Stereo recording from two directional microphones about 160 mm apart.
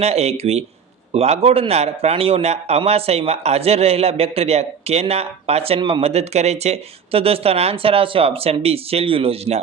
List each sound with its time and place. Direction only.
0.0 s a man's voice: 40° right (ahead or behind)